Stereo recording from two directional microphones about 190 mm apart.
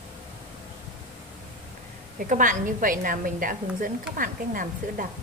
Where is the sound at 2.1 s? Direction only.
45° right (ahead or behind).